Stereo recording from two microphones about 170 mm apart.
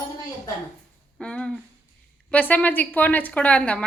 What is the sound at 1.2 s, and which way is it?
A woman's voice, 5° left (ahead or behind).